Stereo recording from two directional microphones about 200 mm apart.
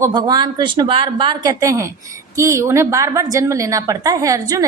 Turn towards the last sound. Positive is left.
turn(degrees=-15)  # may be behind; listen again after turning